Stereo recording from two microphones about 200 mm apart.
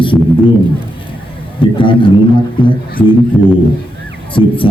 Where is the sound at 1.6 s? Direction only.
25° left (ahead or behind).